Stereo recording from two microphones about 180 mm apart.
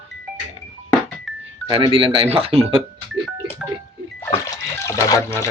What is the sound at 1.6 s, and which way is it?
Speech, 30° right (ahead or behind).